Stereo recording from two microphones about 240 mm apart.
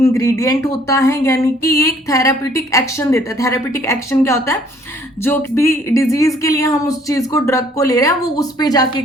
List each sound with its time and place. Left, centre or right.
0.0 s speech: centre